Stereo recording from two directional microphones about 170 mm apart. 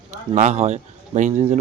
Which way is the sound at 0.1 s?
45° right (ahead or behind).